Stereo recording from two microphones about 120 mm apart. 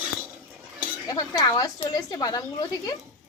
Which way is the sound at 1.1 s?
35° left (ahead or behind).